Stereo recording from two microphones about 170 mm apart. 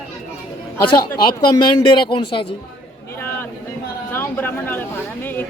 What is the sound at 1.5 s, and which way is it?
Speech, 25° left (ahead or behind).